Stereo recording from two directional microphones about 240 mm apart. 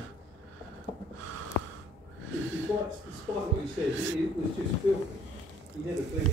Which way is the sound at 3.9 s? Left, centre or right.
Right.